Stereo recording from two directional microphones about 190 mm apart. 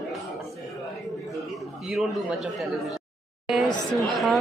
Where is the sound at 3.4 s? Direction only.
Centre (ahead or behind).